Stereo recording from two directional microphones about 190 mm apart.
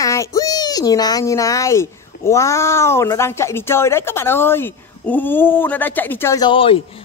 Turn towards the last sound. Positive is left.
turn(degrees=25)  # may be behind; listen again after turning